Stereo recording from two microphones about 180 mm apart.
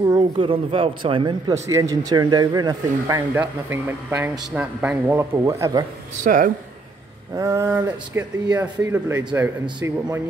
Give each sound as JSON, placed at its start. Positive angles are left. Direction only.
{"t": 0.0, "sound": "speech", "side_deg": -25}
{"t": 1.7, "sound": "speech", "side_deg": -20}
{"t": 3.3, "sound": "a man's voice", "side_deg": -10}
{"t": 6.2, "sound": "speech", "side_deg": -50}
{"t": 7.3, "sound": "a man's voice", "side_deg": -20}